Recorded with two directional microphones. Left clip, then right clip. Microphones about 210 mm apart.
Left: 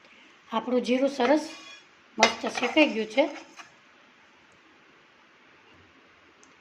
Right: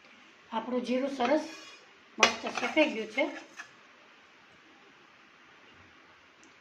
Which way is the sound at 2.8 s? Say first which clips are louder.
Left 4 dB; 50° left (ahead or behind).